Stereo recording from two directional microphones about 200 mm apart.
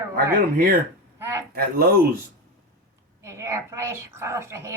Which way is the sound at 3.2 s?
15° right (ahead or behind).